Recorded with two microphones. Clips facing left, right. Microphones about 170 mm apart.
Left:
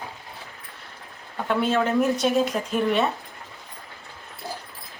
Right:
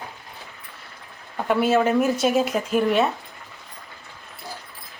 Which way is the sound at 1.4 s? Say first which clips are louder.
Right 3 dB; 10° right (ahead or behind).